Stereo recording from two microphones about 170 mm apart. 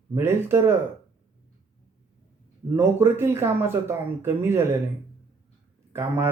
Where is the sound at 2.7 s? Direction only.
15° right (ahead or behind).